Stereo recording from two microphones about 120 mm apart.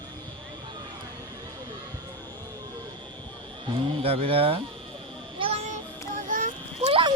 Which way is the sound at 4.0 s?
55° right (ahead or behind).